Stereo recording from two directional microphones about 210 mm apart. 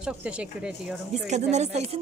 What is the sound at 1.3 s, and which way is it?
Speech, 30° right (ahead or behind).